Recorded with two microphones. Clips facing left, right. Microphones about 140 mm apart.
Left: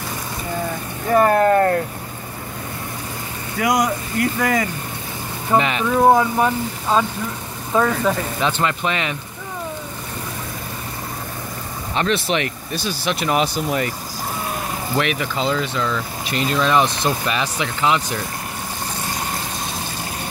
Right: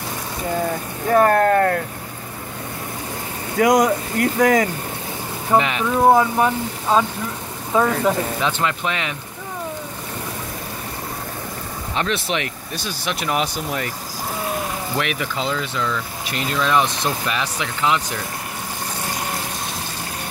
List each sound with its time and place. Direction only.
1.0 s speech: 5° left (ahead or behind)
3.5 s speech: 45° right (ahead or behind)
5.5 s speech: 5° right (ahead or behind)
8.4 s speech: centre (ahead or behind)
11.9 s speech: centre (ahead or behind)
15.0 s speech: 5° right (ahead or behind)